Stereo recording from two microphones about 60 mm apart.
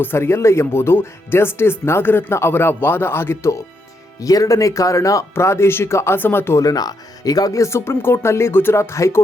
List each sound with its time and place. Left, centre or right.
0.0 s speech: left
4.2 s speech: left
5.3 s speech: left
6.1 s speech: left
6.6 s speech: left
7.8 s speech: left